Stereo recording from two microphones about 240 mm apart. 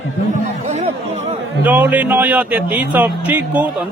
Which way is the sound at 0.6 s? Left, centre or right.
Right.